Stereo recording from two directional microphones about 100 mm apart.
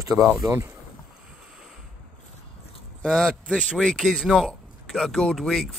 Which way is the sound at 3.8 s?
5° right (ahead or behind).